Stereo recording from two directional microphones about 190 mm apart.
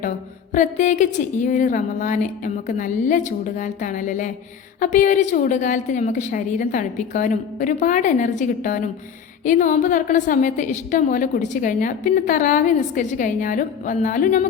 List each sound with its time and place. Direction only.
0.5 s a woman's voice: 40° left (ahead or behind)